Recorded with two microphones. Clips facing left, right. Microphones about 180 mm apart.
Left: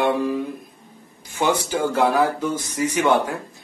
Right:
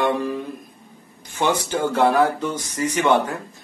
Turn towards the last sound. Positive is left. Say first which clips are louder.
# even
turn(degrees=5)  # may be behind; listen again after turning